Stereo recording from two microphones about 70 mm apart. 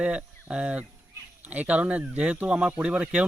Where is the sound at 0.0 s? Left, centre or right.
Centre.